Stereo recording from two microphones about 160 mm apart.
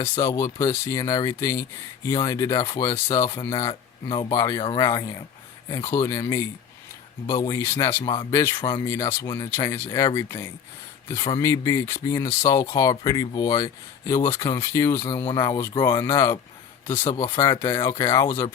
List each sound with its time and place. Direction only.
0.0 s speech: 20° left (ahead or behind)
17.5 s speech: 20° left (ahead or behind)